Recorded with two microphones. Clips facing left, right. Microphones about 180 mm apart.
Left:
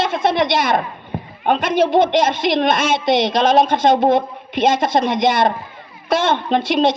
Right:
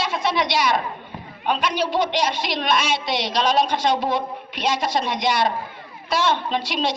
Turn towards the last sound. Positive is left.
turn(degrees=50)  # may be behind; listen again after turning